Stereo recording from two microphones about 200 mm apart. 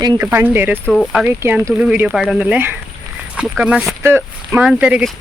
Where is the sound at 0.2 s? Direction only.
10° right (ahead or behind).